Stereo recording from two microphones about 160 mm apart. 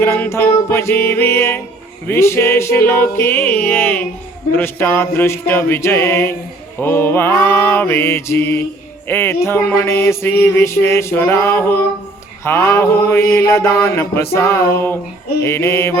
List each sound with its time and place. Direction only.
0.0 s music: 15° left (ahead or behind)